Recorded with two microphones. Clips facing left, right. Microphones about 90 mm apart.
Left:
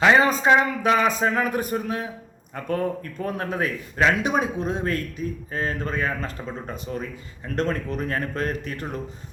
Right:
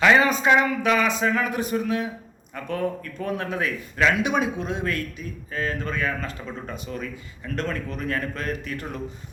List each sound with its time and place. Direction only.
0.0 s a man's voice: 30° left (ahead or behind)